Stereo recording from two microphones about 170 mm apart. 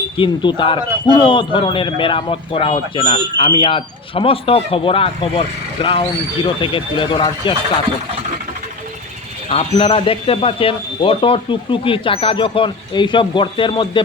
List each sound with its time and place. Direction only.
0.2 s a man's voice: 30° left (ahead or behind)
9.5 s a man's voice: 35° left (ahead or behind)